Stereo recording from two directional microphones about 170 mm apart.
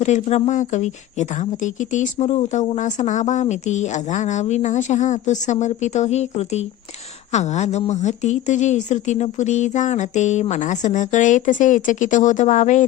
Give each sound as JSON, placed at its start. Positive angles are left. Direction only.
{"t": 0.0, "sound": "speech", "side_deg": 40}